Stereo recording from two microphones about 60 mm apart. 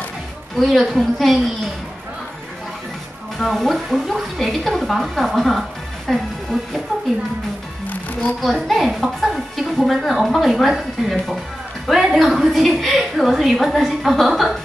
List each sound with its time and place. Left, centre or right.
0.6 s a woman's voice: centre
3.3 s a woman's voice: centre
7.8 s music: left
8.4 s a woman's voice: centre